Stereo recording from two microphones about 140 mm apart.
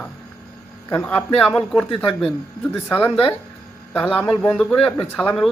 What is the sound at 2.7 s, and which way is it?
A man's voice, 15° left (ahead or behind).